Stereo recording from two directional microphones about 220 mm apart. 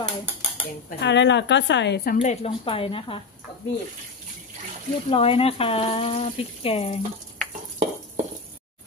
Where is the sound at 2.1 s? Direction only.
30° left (ahead or behind).